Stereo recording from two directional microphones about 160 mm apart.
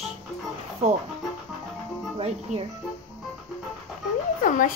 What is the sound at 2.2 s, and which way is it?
Speech, 40° right (ahead or behind).